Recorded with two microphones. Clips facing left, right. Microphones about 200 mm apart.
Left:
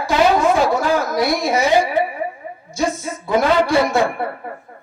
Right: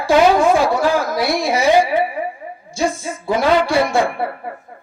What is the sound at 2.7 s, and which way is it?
A man's voice, 30° right (ahead or behind).